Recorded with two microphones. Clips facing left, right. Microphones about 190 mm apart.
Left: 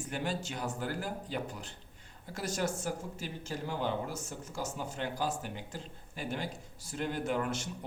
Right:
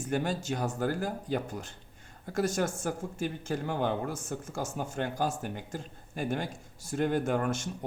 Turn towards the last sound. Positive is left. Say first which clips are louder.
# right 4 dB
turn(degrees=-45)  # may be behind; listen again after turning